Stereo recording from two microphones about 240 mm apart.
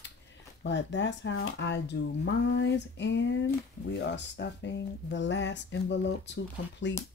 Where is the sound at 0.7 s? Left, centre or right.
Left.